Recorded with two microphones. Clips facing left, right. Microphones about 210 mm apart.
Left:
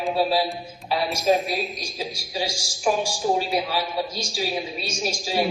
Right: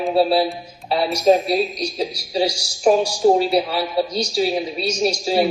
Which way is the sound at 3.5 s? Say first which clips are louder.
Right 5 dB; 35° right (ahead or behind).